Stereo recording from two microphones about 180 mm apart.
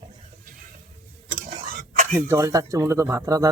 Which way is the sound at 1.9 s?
50° right (ahead or behind).